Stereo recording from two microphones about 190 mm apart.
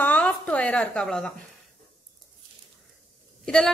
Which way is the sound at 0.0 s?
10° left (ahead or behind).